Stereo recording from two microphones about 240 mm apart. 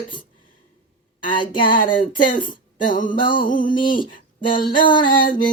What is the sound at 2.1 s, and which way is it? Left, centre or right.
Speech, left.